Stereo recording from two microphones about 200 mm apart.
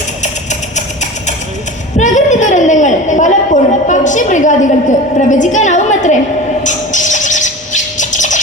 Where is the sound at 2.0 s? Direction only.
40° left (ahead or behind).